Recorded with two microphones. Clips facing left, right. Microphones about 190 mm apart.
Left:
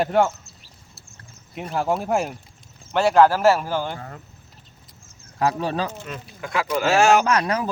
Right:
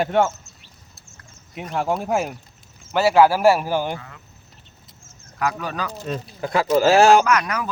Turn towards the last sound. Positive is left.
turn(degrees=30)  # may be behind; listen again after turning